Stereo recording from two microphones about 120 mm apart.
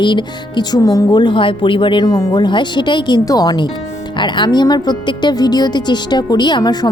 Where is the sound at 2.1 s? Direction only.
30° left (ahead or behind).